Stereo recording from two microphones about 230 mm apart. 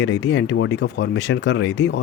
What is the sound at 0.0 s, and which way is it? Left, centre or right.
Speech, left.